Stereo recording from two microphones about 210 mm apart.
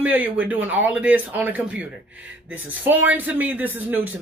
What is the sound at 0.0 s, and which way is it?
Speech, 10° right (ahead or behind).